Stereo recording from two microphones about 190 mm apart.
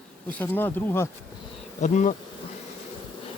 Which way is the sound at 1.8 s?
40° left (ahead or behind).